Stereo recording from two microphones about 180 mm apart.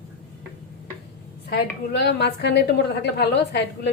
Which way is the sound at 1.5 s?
70° left (ahead or behind).